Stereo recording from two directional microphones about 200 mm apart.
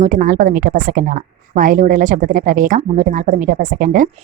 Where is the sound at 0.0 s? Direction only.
40° right (ahead or behind).